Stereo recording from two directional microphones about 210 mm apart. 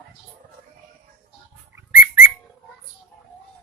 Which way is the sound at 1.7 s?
10° right (ahead or behind).